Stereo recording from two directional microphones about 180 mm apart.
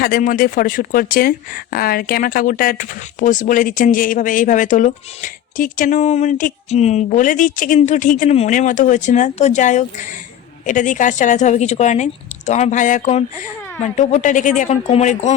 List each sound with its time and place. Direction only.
0.0 s a woman's voice: 50° left (ahead or behind)